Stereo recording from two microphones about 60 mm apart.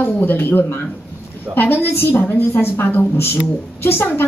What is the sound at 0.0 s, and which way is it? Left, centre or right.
A woman's voice, left.